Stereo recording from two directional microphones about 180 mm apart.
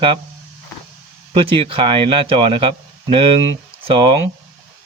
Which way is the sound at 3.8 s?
30° right (ahead or behind).